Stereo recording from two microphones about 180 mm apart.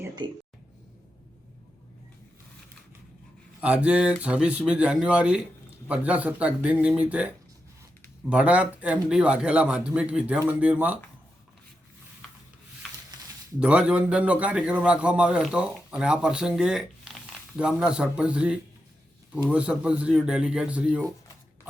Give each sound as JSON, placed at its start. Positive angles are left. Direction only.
{"t": 0.2, "sound": "speech", "side_deg": -25}
{"t": 3.6, "sound": "speech", "side_deg": -5}
{"t": 12.8, "sound": "a sound", "side_deg": 0}
{"t": 13.6, "sound": "a man's voice", "side_deg": -5}